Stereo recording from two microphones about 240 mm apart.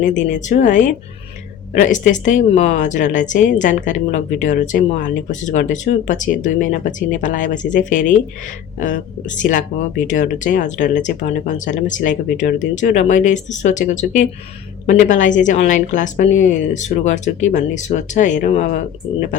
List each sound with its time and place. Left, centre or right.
0.0 s speech: left